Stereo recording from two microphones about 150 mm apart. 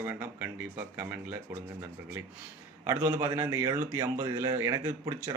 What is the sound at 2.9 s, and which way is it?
A man's voice, 15° right (ahead or behind).